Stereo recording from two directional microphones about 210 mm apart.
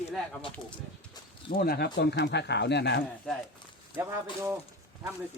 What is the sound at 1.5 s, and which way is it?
Speech, 45° left (ahead or behind).